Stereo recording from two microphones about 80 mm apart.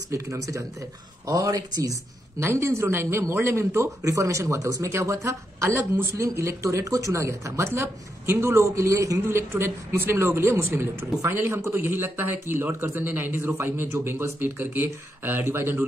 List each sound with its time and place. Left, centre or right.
0.1 s speech: right
2.4 s speech: right